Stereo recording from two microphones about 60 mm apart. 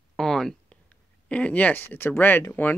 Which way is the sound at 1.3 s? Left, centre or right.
Centre.